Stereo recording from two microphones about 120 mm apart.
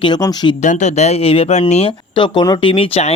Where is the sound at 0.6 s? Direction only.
80° left; by 1.6 s 60° left (ahead or behind).